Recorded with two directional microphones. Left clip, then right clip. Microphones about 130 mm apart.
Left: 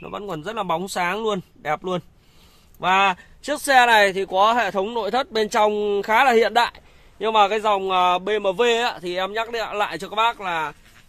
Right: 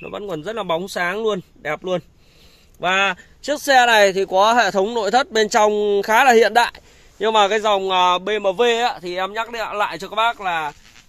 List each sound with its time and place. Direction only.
0.0 s speech: 5° left (ahead or behind)
3.6 s speech: 20° right (ahead or behind)